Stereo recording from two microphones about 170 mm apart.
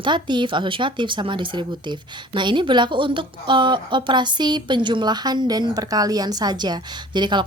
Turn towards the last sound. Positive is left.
turn(degrees=-25)  # may be behind; listen again after turning